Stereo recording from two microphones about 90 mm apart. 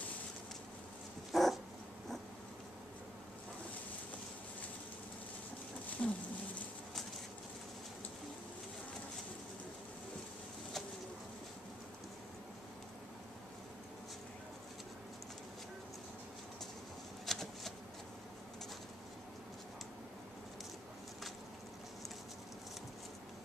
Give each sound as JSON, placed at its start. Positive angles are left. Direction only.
{"t": 1.3, "sound": "dog", "side_deg": 0}
{"t": 6.0, "sound": "a sound", "side_deg": 15}
{"t": 17.3, "sound": "shuffling cards", "side_deg": 5}